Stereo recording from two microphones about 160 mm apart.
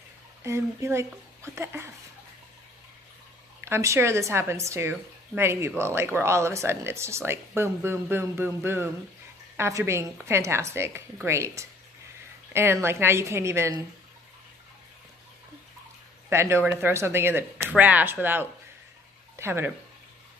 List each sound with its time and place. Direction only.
0.4 s speech: 15° right (ahead or behind)
3.6 s speech: 15° right (ahead or behind)
16.3 s speech: 15° right (ahead or behind)